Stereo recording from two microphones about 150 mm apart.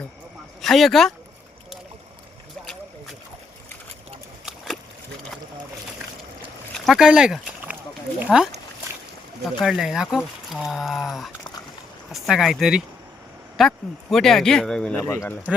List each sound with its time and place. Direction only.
0.6 s speech: centre (ahead or behind)
4.4 s a sound: centre (ahead or behind)
6.7 s a sound: centre (ahead or behind)
8.2 s speech: 5° right (ahead or behind)
9.6 s speech: centre (ahead or behind)
15.0 s speech: 15° left (ahead or behind)